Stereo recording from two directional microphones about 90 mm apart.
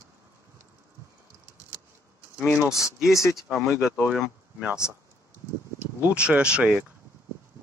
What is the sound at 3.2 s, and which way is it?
Speech, 5° right (ahead or behind).